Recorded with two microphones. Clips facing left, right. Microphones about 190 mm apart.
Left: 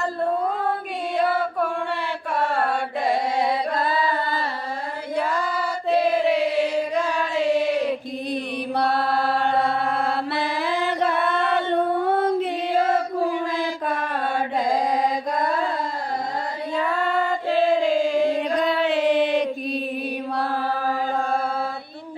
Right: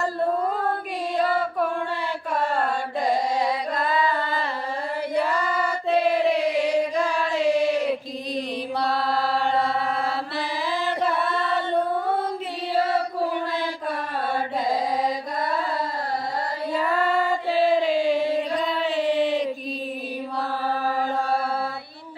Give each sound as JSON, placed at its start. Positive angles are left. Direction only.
{"t": 5.1, "sound": "singing", "side_deg": 0}
{"t": 8.7, "sound": "chant", "side_deg": 60}
{"t": 18.1, "sound": "singing", "side_deg": 45}
{"t": 18.6, "sound": "female singing", "side_deg": 80}